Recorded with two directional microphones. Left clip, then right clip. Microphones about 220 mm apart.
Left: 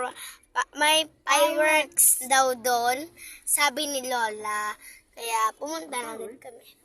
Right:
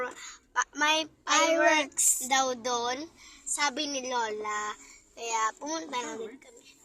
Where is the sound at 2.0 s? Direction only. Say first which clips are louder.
Left 4 dB; 20° left (ahead or behind).